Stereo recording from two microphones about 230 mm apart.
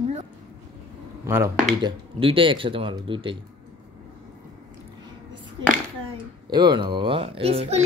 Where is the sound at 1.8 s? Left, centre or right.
Right.